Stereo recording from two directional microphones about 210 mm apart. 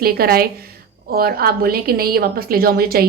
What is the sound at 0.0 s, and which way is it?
Speech, 45° right (ahead or behind).